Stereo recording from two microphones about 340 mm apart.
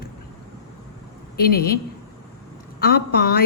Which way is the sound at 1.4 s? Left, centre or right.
Left.